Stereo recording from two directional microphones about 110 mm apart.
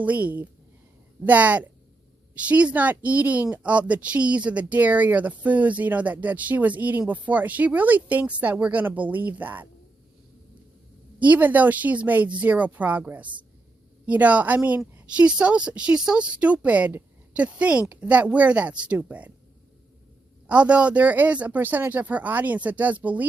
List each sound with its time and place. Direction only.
0.0 s speech: 15° right (ahead or behind)
11.2 s speech: 15° right (ahead or behind)
20.5 s speech: 10° right (ahead or behind)